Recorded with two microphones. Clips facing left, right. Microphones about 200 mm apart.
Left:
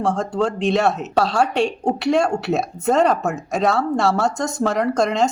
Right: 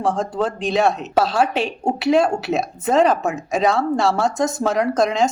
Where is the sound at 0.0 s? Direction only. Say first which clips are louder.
Left 1 dB; centre (ahead or behind).